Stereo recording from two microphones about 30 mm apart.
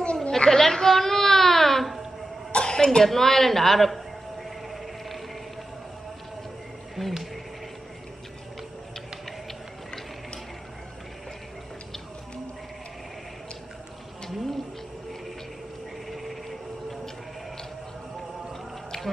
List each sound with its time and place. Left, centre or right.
0.0 s a sound: left
0.5 s baby cry: centre
2.5 s throat clearing: left
3.0 s a sound: centre
7.0 s speech: centre
14.3 s bird: centre
16.1 s music: centre